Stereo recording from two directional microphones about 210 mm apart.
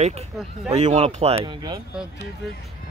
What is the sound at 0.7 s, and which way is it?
Speech, 30° right (ahead or behind).